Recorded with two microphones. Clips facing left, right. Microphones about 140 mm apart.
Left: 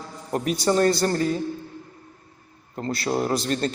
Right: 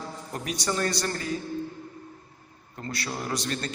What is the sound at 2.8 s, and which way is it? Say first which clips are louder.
Speech: left 9 dB; 35° left (ahead or behind).